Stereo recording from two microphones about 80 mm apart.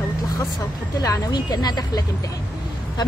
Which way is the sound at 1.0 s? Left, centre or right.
Left.